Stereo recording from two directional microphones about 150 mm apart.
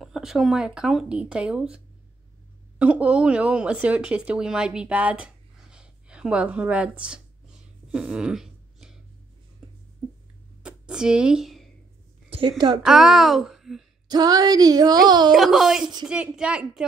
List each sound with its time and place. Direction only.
0.0 s speech: centre (ahead or behind)
2.8 s a woman's voice: 10° right (ahead or behind)
7.9 s a sound: 5° right (ahead or behind)
10.6 s a sound: 5° right (ahead or behind)
12.3 s a woman's voice: 35° right (ahead or behind)
12.8 s speech: centre (ahead or behind)
14.0 s speech: 25° right (ahead or behind)
15.3 s speech: centre (ahead or behind)
15.8 s speech: 30° right (ahead or behind)
16.1 s a woman's voice: 5° right (ahead or behind)